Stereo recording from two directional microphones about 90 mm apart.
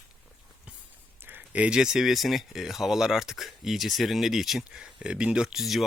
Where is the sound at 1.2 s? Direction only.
15° right (ahead or behind).